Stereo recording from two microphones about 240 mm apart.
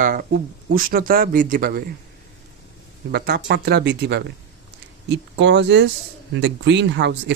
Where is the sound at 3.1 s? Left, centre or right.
Right.